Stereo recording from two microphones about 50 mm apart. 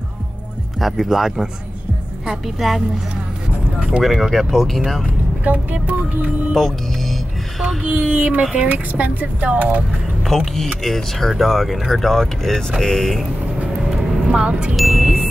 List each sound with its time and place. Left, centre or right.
0.7 s speech: centre
2.6 s speech: centre
4.0 s speech: centre
5.4 s speech: right
6.5 s speech: centre
7.8 s speech: right
10.2 s speech: centre
13.9 s vehicle: centre
14.8 s music: centre